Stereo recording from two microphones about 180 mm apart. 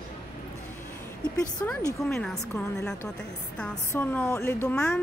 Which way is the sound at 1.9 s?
Centre (ahead or behind).